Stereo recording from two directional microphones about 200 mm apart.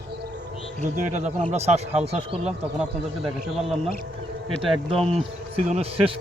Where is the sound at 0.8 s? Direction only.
40° right (ahead or behind).